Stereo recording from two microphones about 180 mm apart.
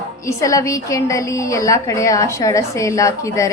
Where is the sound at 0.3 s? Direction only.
15° left (ahead or behind).